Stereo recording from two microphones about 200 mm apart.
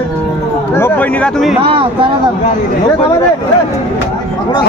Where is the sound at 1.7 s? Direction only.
25° right (ahead or behind).